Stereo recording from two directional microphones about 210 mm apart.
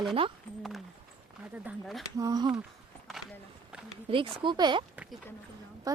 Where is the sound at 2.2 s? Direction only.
15° right (ahead or behind).